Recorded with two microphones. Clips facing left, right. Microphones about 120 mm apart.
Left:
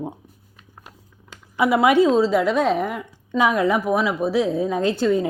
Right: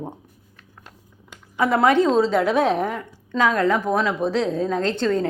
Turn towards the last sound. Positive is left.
turn(degrees=10)  # may be behind; listen again after turning